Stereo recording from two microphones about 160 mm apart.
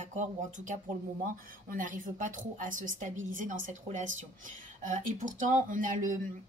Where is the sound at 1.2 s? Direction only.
60° right (ahead or behind).